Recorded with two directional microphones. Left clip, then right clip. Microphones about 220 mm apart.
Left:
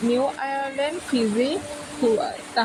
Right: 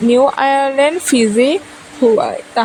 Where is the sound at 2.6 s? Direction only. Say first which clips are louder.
Right 7 dB; 40° right (ahead or behind).